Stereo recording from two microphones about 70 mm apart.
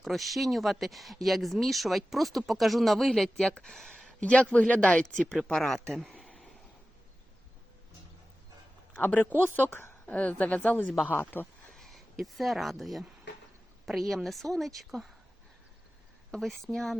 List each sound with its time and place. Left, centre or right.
0.0 s speech: centre
9.0 s a woman's voice: left
10.2 s a woman's voice: left
11.7 s speech: centre
16.3 s speech: centre